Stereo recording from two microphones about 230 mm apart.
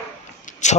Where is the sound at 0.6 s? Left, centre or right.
Left.